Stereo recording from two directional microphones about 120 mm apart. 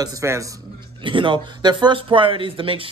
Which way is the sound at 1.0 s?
45° right (ahead or behind).